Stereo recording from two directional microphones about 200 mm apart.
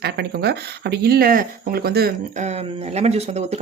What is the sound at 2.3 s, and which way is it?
Speech, 35° right (ahead or behind).